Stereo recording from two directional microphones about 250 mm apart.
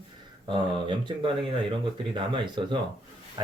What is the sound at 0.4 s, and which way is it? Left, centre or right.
Speech, centre.